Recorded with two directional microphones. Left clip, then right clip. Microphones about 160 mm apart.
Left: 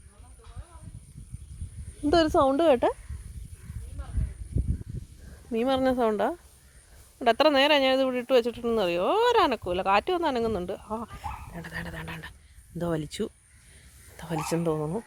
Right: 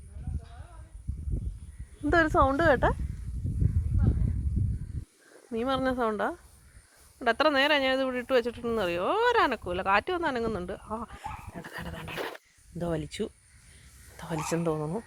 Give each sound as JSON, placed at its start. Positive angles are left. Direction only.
{"t": 2.0, "sound": "a woman's voice", "side_deg": -5}
{"t": 5.5, "sound": "speech", "side_deg": 40}